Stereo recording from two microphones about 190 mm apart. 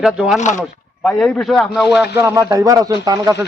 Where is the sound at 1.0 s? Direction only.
5° left (ahead or behind).